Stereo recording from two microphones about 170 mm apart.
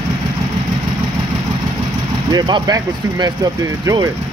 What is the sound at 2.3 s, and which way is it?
Speech, 25° right (ahead or behind).